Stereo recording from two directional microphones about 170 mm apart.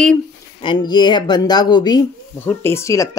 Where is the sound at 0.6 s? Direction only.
30° left (ahead or behind).